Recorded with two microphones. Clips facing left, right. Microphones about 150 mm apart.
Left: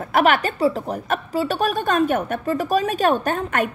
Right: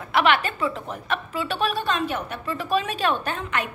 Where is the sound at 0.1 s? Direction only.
45° left (ahead or behind).